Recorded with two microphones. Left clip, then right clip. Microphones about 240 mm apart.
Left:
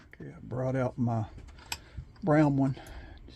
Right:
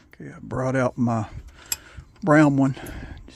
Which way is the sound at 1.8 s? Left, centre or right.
Right.